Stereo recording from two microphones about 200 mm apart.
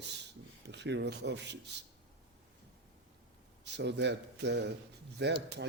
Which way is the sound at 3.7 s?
60° right (ahead or behind).